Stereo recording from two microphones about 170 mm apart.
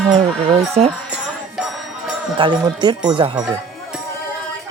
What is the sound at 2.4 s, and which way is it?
Speech, 25° right (ahead or behind).